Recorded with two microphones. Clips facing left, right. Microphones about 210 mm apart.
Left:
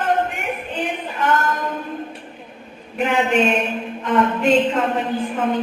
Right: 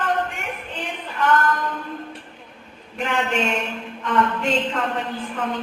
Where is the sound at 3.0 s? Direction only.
15° left (ahead or behind).